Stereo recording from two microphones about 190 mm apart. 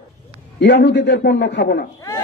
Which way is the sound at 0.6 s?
65° left (ahead or behind).